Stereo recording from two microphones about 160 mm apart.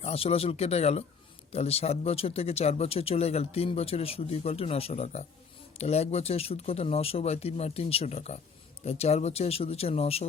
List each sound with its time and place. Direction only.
0.0 s speech: 40° left (ahead or behind)